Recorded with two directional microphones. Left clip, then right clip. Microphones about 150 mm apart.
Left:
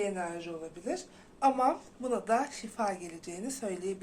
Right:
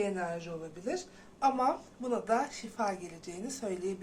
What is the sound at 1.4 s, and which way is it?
Speech, 25° left (ahead or behind).